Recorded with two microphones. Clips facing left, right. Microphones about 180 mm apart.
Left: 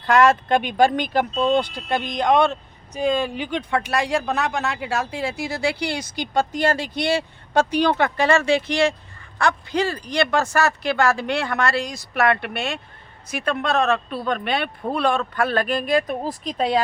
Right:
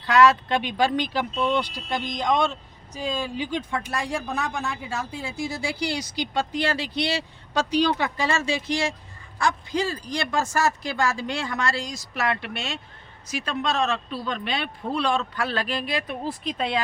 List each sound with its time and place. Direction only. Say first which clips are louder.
0.0 s speech: left 2 dB; 50° left (ahead or behind)